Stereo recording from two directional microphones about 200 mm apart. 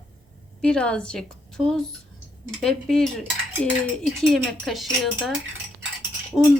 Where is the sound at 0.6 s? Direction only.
5° left (ahead or behind).